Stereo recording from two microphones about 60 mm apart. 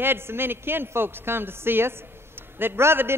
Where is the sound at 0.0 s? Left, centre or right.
Right.